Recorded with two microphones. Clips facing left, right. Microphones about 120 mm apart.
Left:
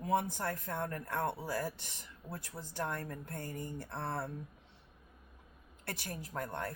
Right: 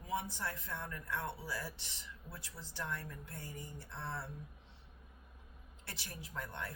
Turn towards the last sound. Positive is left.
turn(degrees=45)  # may be behind; listen again after turning